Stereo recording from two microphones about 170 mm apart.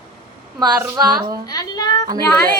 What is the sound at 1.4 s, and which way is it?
Speech, 25° left (ahead or behind).